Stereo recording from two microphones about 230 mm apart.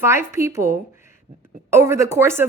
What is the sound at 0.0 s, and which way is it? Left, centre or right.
A woman's voice, centre.